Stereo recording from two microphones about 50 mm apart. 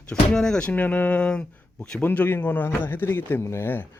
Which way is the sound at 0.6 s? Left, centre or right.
Left.